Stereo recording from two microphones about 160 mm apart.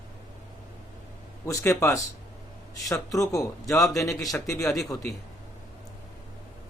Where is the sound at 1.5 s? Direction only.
20° left (ahead or behind).